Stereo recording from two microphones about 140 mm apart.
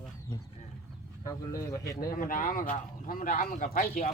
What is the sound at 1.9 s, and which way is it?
Speech, 85° left.